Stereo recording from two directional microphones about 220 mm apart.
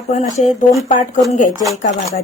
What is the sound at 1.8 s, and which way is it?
Speech, 35° left (ahead or behind).